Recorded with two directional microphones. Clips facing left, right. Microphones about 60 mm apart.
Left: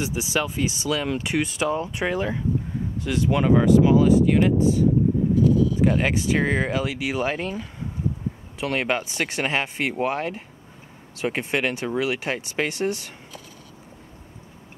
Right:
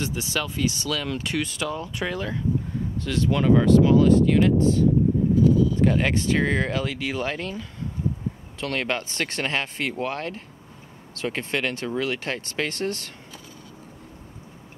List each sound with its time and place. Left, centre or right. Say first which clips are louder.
0.0 s speech: left 3 dB; centre